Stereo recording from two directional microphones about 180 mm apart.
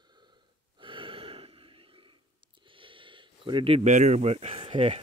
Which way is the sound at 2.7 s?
30° right (ahead or behind).